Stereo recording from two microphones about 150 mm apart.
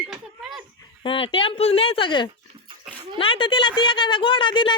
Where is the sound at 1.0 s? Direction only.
35° left (ahead or behind).